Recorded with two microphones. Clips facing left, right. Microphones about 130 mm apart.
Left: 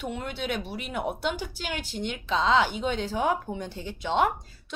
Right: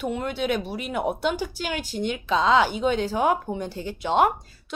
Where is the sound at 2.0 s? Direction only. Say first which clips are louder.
Right 4 dB; 50° right (ahead or behind).